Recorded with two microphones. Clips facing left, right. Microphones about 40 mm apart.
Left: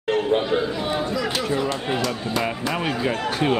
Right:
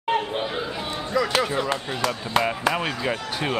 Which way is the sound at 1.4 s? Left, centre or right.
Centre.